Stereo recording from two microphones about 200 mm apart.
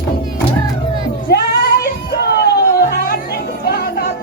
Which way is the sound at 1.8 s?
55° left (ahead or behind).